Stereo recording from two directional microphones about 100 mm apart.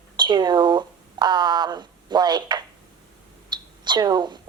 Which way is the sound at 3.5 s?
50° right (ahead or behind).